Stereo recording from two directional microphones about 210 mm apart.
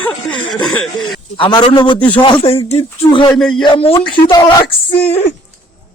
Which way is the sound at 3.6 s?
25° left (ahead or behind).